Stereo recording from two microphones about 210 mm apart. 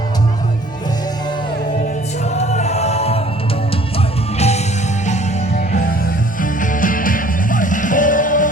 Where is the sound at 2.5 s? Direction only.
30° left (ahead or behind).